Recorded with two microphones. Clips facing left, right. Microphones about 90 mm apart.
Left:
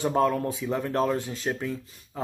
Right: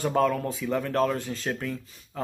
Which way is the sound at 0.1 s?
15° left (ahead or behind).